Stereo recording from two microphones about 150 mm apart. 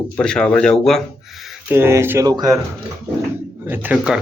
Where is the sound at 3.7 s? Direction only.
10° right (ahead or behind).